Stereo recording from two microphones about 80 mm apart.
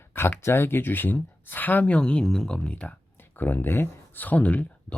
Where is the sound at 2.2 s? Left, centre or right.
Centre.